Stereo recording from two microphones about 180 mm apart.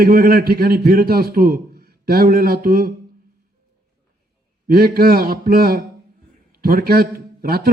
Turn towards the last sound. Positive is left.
turn(degrees=-55)  # may be behind; listen again after turning